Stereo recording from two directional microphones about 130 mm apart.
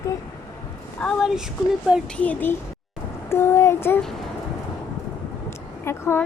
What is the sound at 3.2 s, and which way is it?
Child singing, 20° left (ahead or behind).